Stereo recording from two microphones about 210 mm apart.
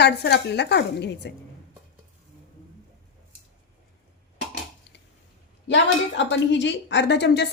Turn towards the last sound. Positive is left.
turn(degrees=55)  # may be behind; listen again after turning